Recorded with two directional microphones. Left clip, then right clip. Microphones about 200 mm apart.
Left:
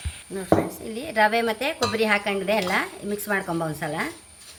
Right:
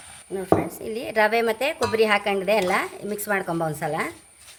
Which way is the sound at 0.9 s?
45° right (ahead or behind).